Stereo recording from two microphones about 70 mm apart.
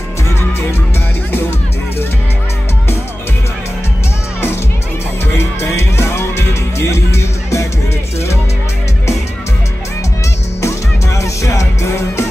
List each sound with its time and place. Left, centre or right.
5.4 s music: left
11.1 s music: left